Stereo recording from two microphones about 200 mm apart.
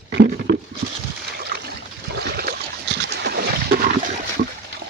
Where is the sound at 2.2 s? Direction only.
50° right (ahead or behind).